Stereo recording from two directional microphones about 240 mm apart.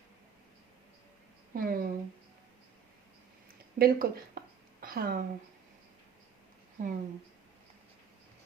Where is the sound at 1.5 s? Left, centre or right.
Right.